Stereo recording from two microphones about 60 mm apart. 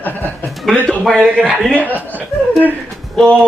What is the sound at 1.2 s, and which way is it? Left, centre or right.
Speech, centre.